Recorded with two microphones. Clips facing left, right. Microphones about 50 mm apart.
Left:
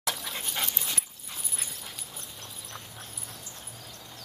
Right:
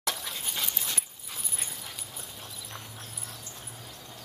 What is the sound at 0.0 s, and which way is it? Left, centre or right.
Dog, centre.